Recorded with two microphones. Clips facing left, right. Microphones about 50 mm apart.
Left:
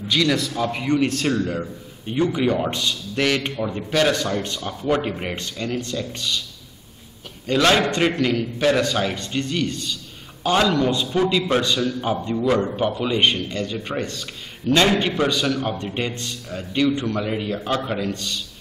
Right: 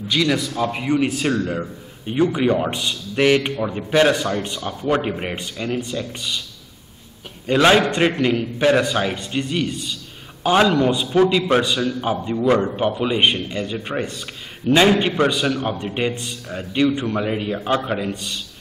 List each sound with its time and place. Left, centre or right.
0.1 s a man's voice: centre
7.4 s a man's voice: centre